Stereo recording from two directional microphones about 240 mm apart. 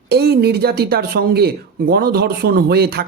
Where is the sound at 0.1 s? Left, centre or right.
Right.